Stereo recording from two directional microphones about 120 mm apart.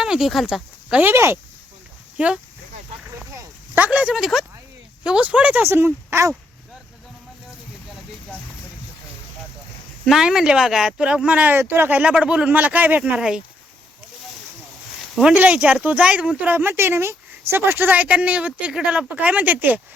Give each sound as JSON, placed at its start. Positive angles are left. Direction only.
{"t": 0.0, "sound": "speech", "side_deg": -5}
{"t": 1.0, "sound": "speech", "side_deg": -20}
{"t": 2.1, "sound": "speech", "side_deg": -5}
{"t": 3.8, "sound": "a woman's voice", "side_deg": -10}
{"t": 10.1, "sound": "a woman's voice", "side_deg": -5}
{"t": 15.1, "sound": "a woman's voice", "side_deg": -5}